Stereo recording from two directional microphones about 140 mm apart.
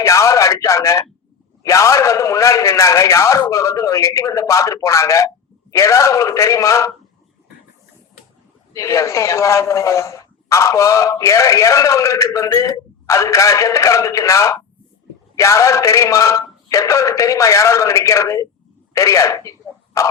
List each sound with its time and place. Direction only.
0.0 s speech: 20° left (ahead or behind)
8.7 s speech: 20° left (ahead or behind)